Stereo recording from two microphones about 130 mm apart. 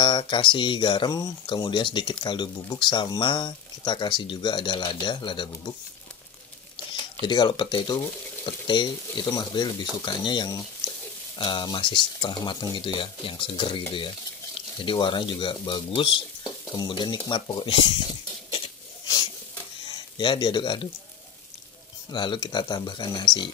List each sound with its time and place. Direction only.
0.0 s speech: 35° left (ahead or behind)
7.2 s speech: 35° left (ahead or behind)
16.4 s speech: 30° left (ahead or behind)
19.9 s speech: 35° left (ahead or behind)
22.1 s speech: 35° left (ahead or behind)